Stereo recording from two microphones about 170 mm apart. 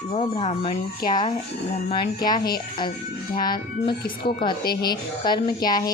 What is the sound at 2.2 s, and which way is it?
Speech, 25° left (ahead or behind).